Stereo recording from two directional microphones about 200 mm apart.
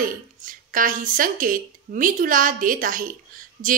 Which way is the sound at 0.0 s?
40° right (ahead or behind).